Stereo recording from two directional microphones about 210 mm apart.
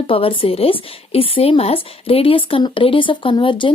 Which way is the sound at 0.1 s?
25° left (ahead or behind).